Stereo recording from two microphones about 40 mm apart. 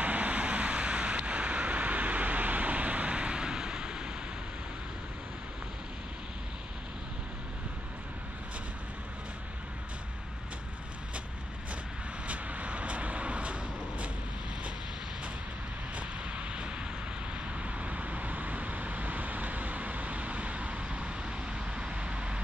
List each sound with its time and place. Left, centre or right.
0.0 s vehicle: right
12.3 s vehicle: right
16.0 s vehicle: right